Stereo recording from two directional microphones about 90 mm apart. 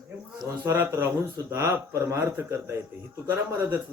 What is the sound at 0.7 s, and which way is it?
A man's voice, 25° right (ahead or behind).